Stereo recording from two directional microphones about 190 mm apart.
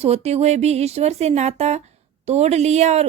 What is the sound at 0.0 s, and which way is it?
Speech, 35° right (ahead or behind).